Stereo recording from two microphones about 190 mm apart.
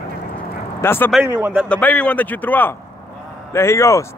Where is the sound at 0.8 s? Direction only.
10° left (ahead or behind).